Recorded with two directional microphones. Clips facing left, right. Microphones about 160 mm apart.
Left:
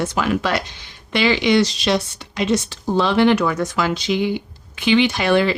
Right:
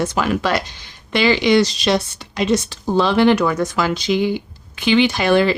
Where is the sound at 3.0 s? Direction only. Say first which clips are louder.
Right 1 dB; 40° right (ahead or behind).